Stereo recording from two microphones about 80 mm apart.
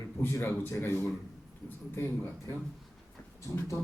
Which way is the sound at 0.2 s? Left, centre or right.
Left.